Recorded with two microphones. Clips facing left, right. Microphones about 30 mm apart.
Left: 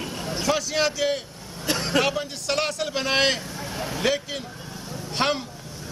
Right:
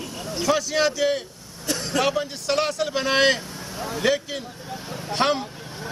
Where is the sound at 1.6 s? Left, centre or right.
Left.